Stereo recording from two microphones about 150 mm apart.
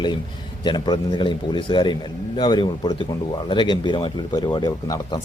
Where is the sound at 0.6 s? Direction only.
30° left (ahead or behind).